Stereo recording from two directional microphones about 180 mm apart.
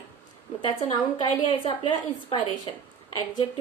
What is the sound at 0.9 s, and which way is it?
A woman's voice, 25° left (ahead or behind).